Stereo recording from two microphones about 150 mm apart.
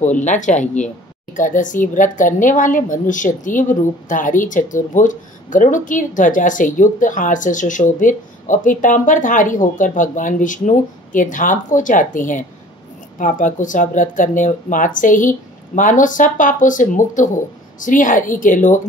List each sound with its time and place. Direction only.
0.0 s a woman's voice: 55° left (ahead or behind)